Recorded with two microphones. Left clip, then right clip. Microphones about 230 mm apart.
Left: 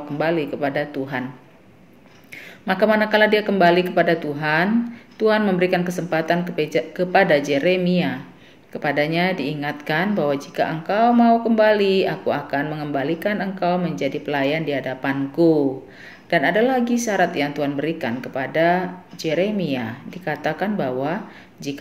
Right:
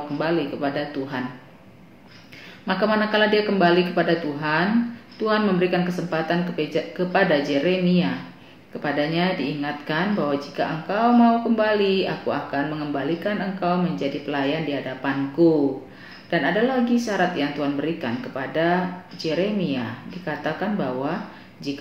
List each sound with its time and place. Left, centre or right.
0.2 s speech: left
2.6 s speech: left